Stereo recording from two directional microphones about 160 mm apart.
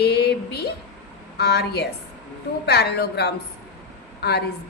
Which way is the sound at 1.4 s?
90° left.